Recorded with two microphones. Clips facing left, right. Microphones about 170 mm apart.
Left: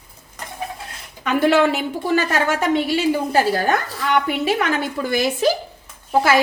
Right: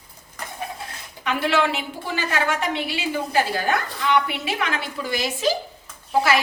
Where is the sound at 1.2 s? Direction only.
45° left (ahead or behind).